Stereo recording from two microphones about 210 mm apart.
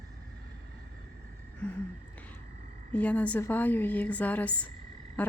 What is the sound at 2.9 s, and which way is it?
A woman's voice, 5° left (ahead or behind).